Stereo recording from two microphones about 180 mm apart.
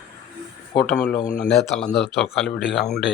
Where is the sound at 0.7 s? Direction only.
5° left (ahead or behind).